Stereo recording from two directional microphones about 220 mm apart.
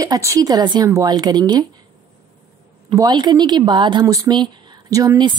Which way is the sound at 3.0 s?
20° right (ahead or behind).